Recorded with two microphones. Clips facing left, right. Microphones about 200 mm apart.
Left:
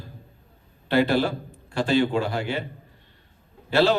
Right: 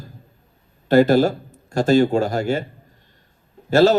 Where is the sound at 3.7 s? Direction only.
45° right (ahead or behind).